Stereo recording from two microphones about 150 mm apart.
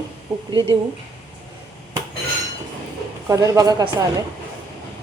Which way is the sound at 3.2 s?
20° right (ahead or behind).